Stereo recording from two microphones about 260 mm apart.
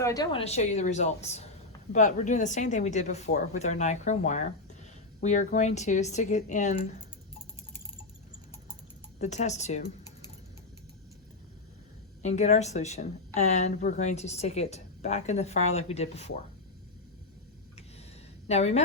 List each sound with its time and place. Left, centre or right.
0.0 s a woman's voice: centre
9.2 s a woman's voice: left
12.2 s a woman's voice: left
18.4 s a woman's voice: left